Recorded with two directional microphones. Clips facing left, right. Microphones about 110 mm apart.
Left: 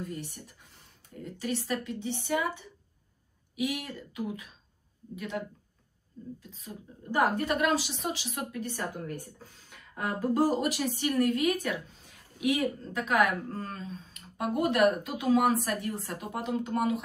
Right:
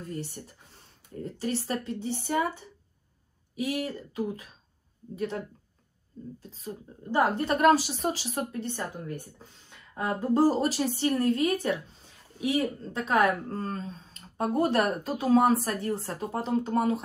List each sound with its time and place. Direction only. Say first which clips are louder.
0.1 s a woman's voice: right 3 dB; 40° right (ahead or behind)
7.1 s a woman's voice: right 2 dB; 35° right (ahead or behind)